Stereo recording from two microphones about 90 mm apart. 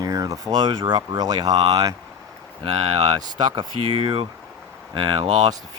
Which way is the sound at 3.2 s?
50° right (ahead or behind).